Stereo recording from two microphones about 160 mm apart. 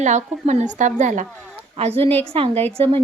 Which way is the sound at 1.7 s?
40° right (ahead or behind).